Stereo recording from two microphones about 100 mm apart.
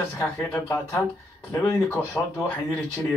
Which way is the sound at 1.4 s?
30° left (ahead or behind).